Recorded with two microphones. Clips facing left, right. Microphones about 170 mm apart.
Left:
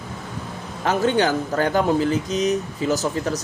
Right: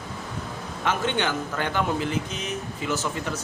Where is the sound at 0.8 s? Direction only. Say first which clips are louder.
Left 6 dB; 40° left (ahead or behind).